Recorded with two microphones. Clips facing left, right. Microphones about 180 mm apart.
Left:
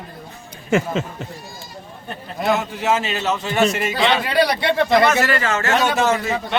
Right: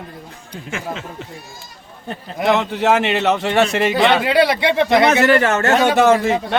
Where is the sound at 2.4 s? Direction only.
70° right (ahead or behind).